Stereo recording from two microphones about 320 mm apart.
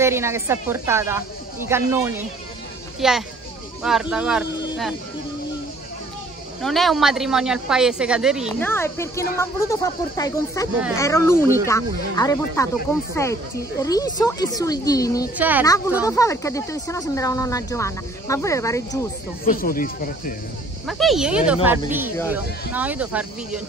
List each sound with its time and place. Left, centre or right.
0.0 s a woman's voice: centre
6.6 s a woman's voice: centre
15.3 s a woman's voice: centre
16.0 s speech: centre
19.4 s speech: left
20.8 s a woman's voice: centre